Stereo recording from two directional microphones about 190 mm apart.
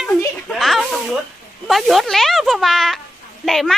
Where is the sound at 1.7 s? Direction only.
Centre (ahead or behind).